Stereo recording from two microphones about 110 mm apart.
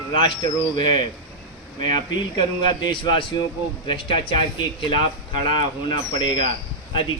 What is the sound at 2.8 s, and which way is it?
Speech, 45° left (ahead or behind).